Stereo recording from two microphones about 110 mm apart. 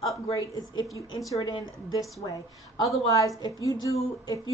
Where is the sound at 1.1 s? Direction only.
35° left (ahead or behind).